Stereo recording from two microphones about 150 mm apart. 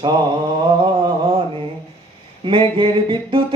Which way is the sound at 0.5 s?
30° right (ahead or behind).